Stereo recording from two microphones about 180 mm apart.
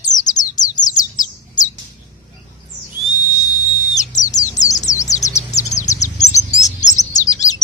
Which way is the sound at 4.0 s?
40° left (ahead or behind).